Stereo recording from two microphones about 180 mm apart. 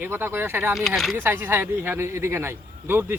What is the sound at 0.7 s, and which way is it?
Speech, centre (ahead or behind).